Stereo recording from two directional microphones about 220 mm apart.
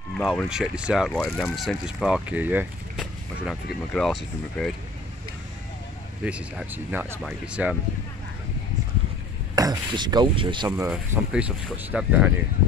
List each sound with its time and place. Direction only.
0.2 s speech: centre (ahead or behind)
6.2 s speech: 5° right (ahead or behind)
9.6 s a sound: 20° right (ahead or behind)
10.9 s speech: 5° right (ahead or behind)